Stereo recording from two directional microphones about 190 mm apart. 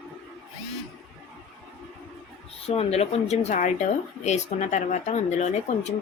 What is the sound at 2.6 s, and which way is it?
Speech, 35° left (ahead or behind).